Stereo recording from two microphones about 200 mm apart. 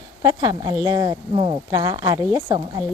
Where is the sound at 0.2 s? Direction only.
20° right (ahead or behind).